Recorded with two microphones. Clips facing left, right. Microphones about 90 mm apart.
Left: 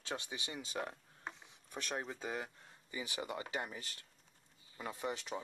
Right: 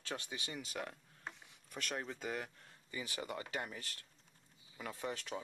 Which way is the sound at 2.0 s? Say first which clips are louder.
Left 1 dB; 15° left (ahead or behind).